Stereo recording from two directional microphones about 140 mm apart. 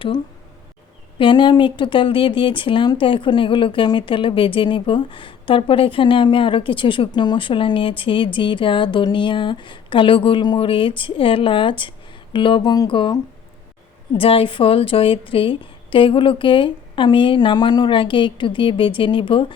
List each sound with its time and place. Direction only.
1.2 s speech: 35° left (ahead or behind)
14.2 s speech: 40° left (ahead or behind)